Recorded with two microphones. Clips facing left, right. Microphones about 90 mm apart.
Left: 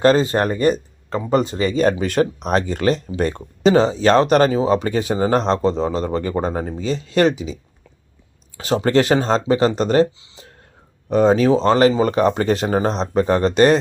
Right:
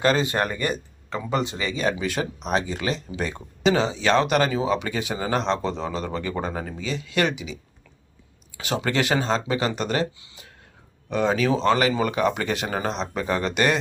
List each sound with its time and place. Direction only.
0.0 s speech: 35° left (ahead or behind)